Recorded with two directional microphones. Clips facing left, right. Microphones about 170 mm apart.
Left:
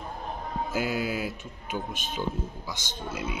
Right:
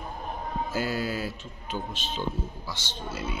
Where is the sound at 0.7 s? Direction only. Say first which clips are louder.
Left 1 dB; 10° left (ahead or behind).